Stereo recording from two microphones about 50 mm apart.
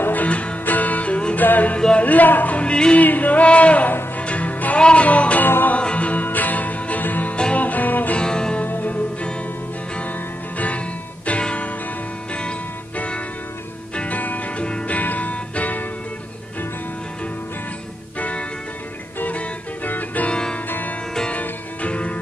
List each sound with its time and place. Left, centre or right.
0.0 s music: left
2.0 s speech: left
3.0 s music: left
8.2 s music: centre
8.6 s music: left
15.0 s music: left
18.2 s music: left
20.2 s music: centre
20.6 s music: left
21.3 s music: left